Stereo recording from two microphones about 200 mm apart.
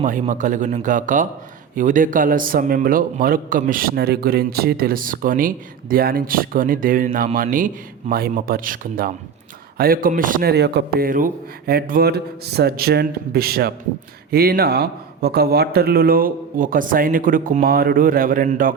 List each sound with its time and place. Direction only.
0.0 s a man's voice: 40° right (ahead or behind)